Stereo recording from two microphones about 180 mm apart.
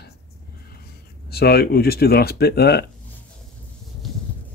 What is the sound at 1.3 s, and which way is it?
Speech, 60° left (ahead or behind).